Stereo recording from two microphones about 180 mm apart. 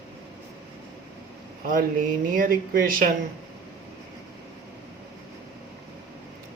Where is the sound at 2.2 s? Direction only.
50° right (ahead or behind).